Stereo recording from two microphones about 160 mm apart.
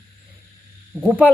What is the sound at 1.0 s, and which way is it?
Speech, 5° right (ahead or behind).